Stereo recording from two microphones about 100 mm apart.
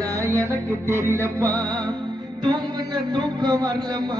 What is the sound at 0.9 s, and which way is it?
Music, 25° right (ahead or behind).